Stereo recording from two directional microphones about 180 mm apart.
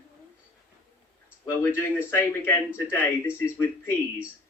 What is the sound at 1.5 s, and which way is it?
A man's voice, 15° left (ahead or behind).